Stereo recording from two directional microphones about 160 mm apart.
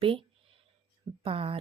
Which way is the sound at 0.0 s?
35° right (ahead or behind).